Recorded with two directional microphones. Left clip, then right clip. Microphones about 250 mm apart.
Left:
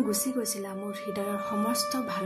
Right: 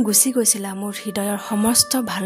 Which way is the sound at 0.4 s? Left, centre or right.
Right.